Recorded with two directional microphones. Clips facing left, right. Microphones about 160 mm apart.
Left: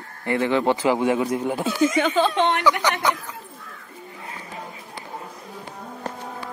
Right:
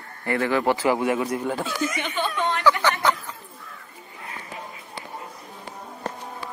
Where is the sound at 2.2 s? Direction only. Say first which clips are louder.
Left 5 dB; 80° left.